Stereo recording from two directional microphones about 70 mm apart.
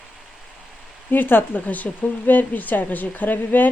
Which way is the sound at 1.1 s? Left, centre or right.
Left.